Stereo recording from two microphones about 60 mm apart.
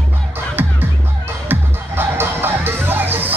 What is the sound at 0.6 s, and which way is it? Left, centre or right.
Music, right.